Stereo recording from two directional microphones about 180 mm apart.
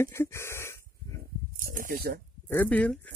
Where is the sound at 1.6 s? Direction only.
50° right (ahead or behind).